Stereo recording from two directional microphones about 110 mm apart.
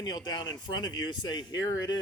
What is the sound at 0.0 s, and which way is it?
Speech, 40° left (ahead or behind).